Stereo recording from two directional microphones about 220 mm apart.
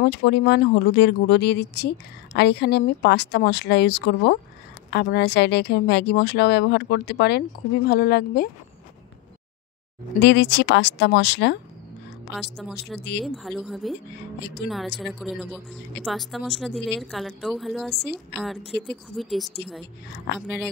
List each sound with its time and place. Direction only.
0.0 s speech: 50° left (ahead or behind)
10.1 s speech: 55° left (ahead or behind)
12.7 s speech: 50° left (ahead or behind)
13.2 s speech: centre (ahead or behind)
20.3 s speech: 50° left (ahead or behind)